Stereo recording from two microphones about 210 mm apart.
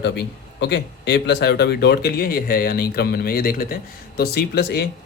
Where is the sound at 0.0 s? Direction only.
55° left (ahead or behind).